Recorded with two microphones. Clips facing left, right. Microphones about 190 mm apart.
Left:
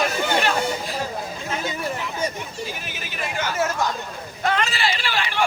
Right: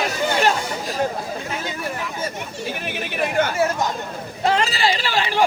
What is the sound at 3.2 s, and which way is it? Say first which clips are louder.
Chatter: right 7 dB; 55° right (ahead or behind).